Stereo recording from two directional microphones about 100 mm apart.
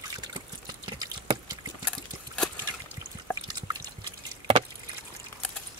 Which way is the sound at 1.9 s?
10° left (ahead or behind).